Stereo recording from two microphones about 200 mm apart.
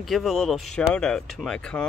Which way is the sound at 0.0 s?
Centre (ahead or behind).